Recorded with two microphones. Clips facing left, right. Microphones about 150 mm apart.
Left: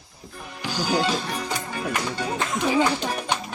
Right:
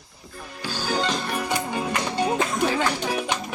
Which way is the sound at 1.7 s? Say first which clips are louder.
Right 2 dB; 20° right (ahead or behind).